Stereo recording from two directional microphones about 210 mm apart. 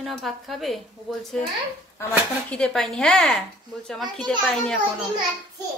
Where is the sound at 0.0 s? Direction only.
Centre (ahead or behind).